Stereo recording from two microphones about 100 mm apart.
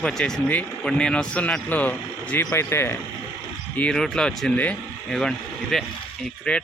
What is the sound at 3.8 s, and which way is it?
Speech, 10° left (ahead or behind).